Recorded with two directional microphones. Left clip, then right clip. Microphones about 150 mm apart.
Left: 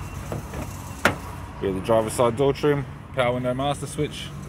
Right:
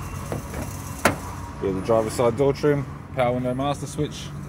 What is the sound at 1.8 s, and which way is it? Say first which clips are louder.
Speech: even; 15° left (ahead or behind).